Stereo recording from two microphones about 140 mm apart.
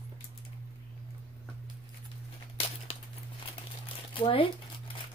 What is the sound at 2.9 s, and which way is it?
Crumpling, 40° left (ahead or behind).